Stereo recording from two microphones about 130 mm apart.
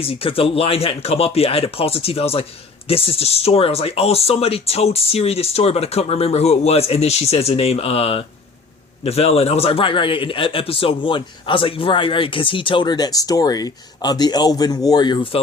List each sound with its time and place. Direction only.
0.0 s a man's voice: 45° left (ahead or behind)